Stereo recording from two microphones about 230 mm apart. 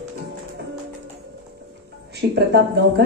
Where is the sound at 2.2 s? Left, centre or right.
Right.